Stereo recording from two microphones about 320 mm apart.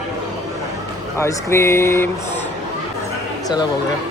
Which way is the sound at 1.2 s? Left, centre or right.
Centre.